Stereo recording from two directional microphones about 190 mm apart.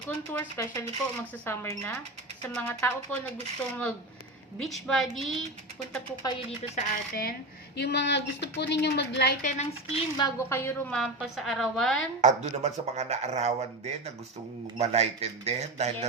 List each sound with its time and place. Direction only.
0.5 s speech: 15° left (ahead or behind)
4.5 s a woman's voice: centre (ahead or behind)
6.2 s speech: 25° left (ahead or behind)
6.7 s speech: 50° left (ahead or behind)
7.8 s a woman's voice: 65° left (ahead or behind)
9.4 s a woman's voice: 40° left (ahead or behind)
10.2 s a woman's voice: 20° left (ahead or behind); by 12.0 s centre (ahead or behind)
12.2 s speech: 35° right (ahead or behind)